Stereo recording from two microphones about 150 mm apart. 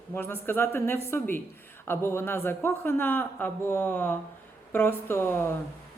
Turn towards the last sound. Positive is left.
turn(degrees=15)  # may be behind; listen again after turning